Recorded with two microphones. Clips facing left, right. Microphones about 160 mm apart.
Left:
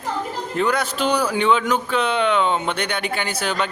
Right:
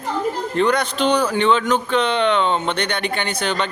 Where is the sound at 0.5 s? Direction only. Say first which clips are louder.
Right 2 dB; 5° left (ahead or behind).